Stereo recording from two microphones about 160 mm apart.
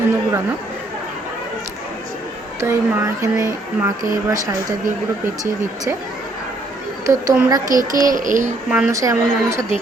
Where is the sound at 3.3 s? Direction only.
20° right (ahead or behind).